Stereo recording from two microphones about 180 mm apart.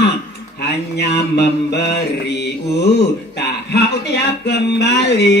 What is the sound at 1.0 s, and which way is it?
Music, 70° left (ahead or behind).